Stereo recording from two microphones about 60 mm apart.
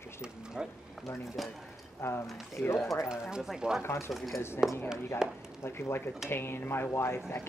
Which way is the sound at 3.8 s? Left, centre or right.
Left.